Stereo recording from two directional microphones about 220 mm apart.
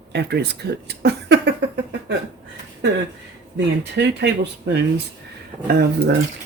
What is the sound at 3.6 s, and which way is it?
Speech, 50° right (ahead or behind).